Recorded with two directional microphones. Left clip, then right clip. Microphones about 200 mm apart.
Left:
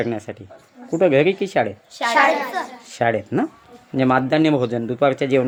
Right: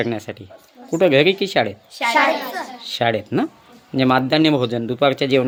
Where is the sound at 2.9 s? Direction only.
5° right (ahead or behind).